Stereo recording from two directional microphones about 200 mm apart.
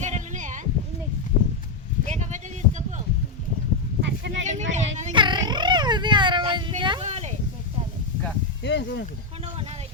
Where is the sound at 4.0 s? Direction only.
60° right (ahead or behind).